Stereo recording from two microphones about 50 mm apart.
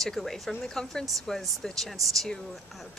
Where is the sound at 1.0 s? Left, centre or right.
Centre.